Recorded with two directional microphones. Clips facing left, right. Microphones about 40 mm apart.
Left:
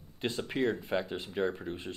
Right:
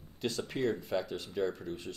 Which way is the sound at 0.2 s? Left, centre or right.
Left.